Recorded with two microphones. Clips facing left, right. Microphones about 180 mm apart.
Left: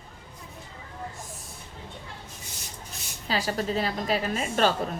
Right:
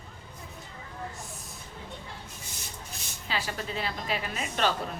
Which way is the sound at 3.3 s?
40° left (ahead or behind).